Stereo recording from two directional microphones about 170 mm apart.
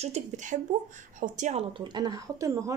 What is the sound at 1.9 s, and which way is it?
Speech, 25° right (ahead or behind).